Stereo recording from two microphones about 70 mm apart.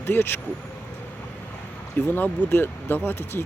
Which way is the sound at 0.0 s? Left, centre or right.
Left.